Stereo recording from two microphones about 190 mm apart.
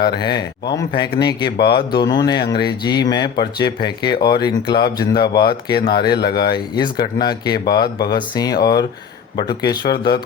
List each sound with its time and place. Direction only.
0.0 s speech: 20° left (ahead or behind)
6.1 s speech: 60° left (ahead or behind)
6.4 s speech: 20° left (ahead or behind)